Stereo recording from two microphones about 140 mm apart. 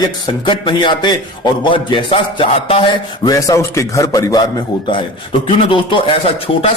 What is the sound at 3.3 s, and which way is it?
Speech, 25° left (ahead or behind).